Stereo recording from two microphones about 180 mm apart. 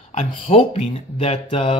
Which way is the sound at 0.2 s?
30° left (ahead or behind).